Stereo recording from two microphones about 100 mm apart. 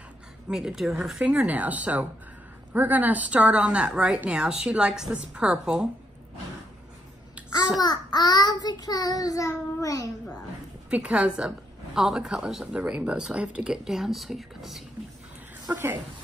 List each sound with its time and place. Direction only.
0.5 s a woman's voice: 5° right (ahead or behind)
1.2 s a woman's voice: 15° right (ahead or behind)
7.8 s child singing: 45° left (ahead or behind)
10.9 s a woman's voice: 15° right (ahead or behind)
15.7 s speech: 20° right (ahead or behind)